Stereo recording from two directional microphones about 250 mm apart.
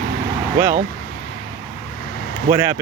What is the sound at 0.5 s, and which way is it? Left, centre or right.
Speech, centre.